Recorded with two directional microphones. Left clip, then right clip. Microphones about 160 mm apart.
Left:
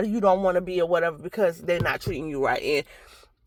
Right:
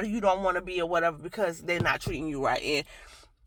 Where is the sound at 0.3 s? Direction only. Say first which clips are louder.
Left 5 dB; 25° left (ahead or behind).